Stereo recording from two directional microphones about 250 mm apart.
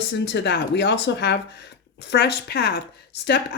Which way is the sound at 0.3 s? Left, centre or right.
Left.